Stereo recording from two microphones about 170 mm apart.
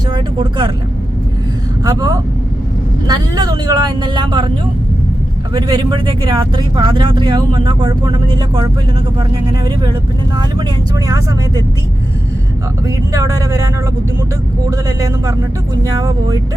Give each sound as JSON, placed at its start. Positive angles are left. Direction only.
{"t": 0.1, "sound": "vehicle", "side_deg": -30}
{"t": 1.8, "sound": "speech", "side_deg": -20}
{"t": 5.5, "sound": "speech", "side_deg": -25}
{"t": 13.1, "sound": "speech", "side_deg": -20}
{"t": 14.7, "sound": "speech", "side_deg": -20}